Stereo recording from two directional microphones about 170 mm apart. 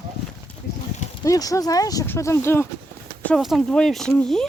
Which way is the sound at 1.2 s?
20° left (ahead or behind).